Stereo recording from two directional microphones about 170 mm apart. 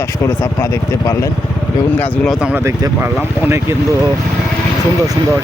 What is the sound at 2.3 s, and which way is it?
Speech, 5° right (ahead or behind).